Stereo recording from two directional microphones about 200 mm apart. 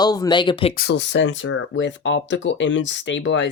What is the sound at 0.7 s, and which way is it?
Speech, 55° left (ahead or behind).